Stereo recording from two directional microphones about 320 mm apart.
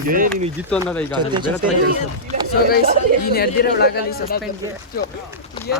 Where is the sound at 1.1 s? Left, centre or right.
Centre.